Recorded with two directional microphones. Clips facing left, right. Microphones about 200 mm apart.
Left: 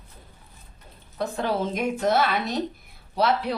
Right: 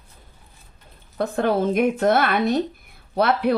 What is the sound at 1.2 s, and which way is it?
Speech, 55° right (ahead or behind).